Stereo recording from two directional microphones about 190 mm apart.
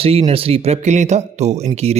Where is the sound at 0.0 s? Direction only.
35° right (ahead or behind).